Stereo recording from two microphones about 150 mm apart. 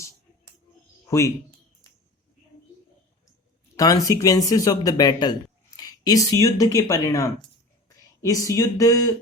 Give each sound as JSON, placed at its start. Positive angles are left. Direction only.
{"t": 1.0, "sound": "speech", "side_deg": 20}
{"t": 3.8, "sound": "speech", "side_deg": 25}